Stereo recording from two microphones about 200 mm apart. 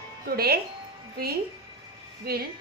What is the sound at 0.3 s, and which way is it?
Speech, 50° right (ahead or behind).